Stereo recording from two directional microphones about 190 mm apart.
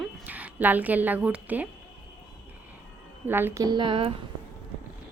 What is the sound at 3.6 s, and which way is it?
Speech, 25° right (ahead or behind).